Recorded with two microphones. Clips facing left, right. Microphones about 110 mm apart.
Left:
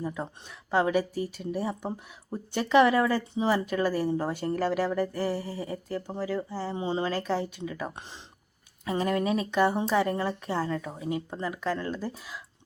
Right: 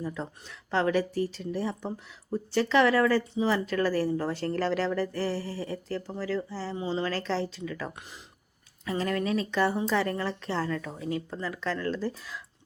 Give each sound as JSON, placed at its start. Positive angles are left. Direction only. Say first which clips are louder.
{"t": 0.0, "sound": "speech", "louder": "left 1 dB", "side_deg": 15}
{"t": 8.8, "sound": "speech", "louder": "left 2 dB", "side_deg": 20}